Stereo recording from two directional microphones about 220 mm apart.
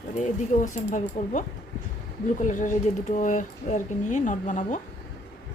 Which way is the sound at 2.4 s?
35° left (ahead or behind).